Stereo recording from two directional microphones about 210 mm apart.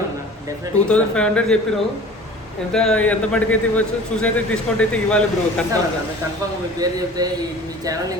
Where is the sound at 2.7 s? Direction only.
5° left (ahead or behind).